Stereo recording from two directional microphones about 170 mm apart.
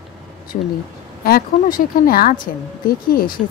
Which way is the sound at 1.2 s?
60° left (ahead or behind).